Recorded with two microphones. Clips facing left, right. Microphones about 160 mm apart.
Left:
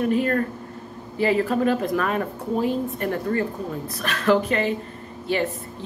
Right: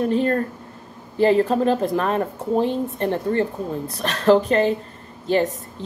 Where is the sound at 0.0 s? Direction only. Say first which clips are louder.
Right 1 dB; 30° right (ahead or behind).